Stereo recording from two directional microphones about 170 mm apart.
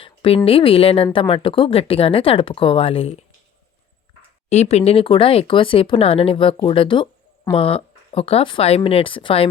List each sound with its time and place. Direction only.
0.0 s speech: 30° left (ahead or behind)
4.4 s speech: 40° left (ahead or behind)